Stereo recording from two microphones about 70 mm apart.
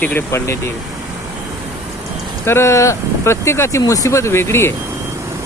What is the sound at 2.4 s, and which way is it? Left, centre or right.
Speech, left.